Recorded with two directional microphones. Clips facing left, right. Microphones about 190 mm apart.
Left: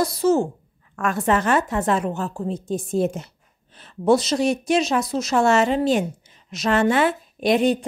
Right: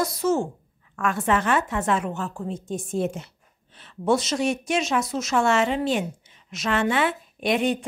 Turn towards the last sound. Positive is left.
turn(degrees=35)  # may be behind; listen again after turning